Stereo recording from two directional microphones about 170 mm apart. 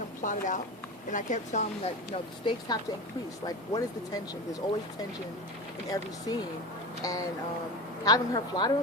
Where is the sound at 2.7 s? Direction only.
25° left (ahead or behind).